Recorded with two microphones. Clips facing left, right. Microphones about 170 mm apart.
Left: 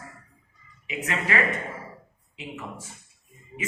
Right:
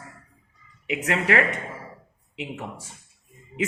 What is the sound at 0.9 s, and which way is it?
Speech, 70° right (ahead or behind).